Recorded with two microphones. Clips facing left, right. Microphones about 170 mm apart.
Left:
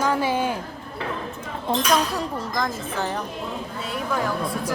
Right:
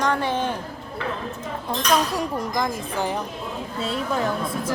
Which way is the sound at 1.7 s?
25° left (ahead or behind).